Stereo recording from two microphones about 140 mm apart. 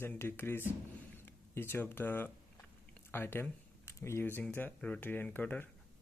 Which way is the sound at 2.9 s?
15° left (ahead or behind).